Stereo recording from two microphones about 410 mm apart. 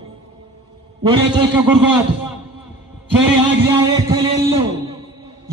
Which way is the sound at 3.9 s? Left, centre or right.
Centre.